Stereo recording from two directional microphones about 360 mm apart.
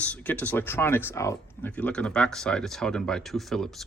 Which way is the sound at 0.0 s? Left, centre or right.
Centre.